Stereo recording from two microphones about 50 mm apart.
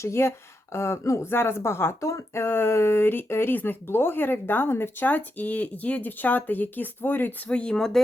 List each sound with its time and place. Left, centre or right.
0.0 s speech: left
1.3 s speech: left
2.0 s speech: left
2.4 s speech: left
3.5 s speech: left
5.0 s speech: left
7.5 s speech: centre